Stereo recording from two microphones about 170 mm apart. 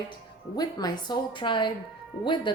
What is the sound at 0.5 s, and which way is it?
Speech, 25° left (ahead or behind).